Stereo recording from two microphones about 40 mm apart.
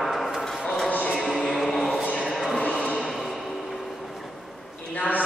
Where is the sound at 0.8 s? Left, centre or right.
Left.